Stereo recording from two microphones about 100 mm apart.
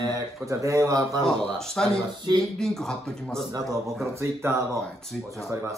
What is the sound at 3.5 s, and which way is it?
Speech, 35° right (ahead or behind).